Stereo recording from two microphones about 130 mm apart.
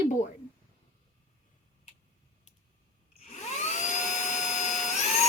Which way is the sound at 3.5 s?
70° left (ahead or behind).